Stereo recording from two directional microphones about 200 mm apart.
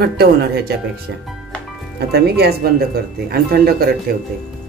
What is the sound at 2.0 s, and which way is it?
Speech, 55° right (ahead or behind).